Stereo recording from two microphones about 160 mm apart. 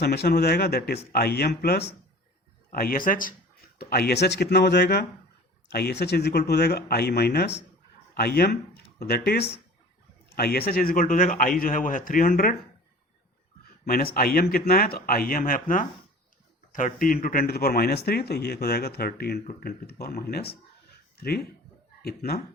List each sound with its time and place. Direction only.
0.0 s speech: 85° left
2.7 s a man's voice: 65° left (ahead or behind)
3.8 s a man's voice: 70° left (ahead or behind)
13.8 s a man's voice: 70° left (ahead or behind)
17.2 s speech: 70° left (ahead or behind)